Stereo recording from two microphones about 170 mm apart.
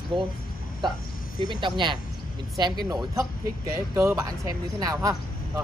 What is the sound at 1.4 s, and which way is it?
Speech, 25° right (ahead or behind).